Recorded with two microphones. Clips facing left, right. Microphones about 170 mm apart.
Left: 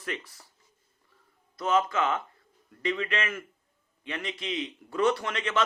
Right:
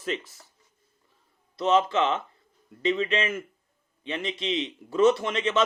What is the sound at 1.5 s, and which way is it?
A man's voice, 25° right (ahead or behind).